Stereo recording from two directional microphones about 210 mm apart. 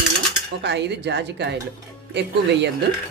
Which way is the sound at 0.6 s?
55° right (ahead or behind).